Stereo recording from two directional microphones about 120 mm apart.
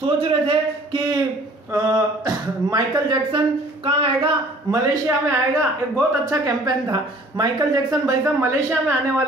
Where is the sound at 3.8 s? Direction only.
50° right (ahead or behind).